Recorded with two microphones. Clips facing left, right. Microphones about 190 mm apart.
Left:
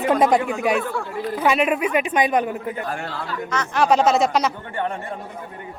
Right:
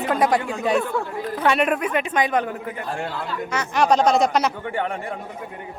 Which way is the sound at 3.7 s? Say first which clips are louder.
Even; centre (ahead or behind).